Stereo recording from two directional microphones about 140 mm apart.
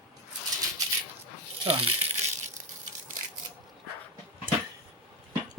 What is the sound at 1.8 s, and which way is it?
Crumpling, 50° right (ahead or behind).